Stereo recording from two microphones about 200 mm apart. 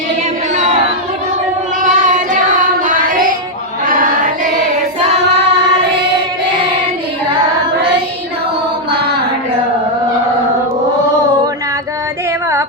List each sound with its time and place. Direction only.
1.8 s child singing: 40° right (ahead or behind)
2.8 s music: 45° right (ahead or behind)
3.8 s choir: 45° right (ahead or behind)